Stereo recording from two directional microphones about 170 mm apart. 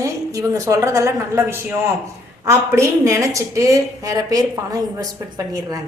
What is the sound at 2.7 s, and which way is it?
Speech, 15° right (ahead or behind).